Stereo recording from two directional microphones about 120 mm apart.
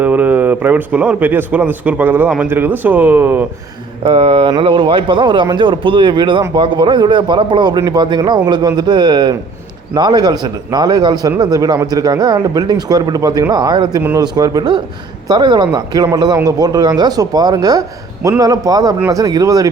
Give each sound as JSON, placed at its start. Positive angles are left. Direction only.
{"t": 0.0, "sound": "speech", "side_deg": -15}
{"t": 4.0, "sound": "a man's voice", "side_deg": -45}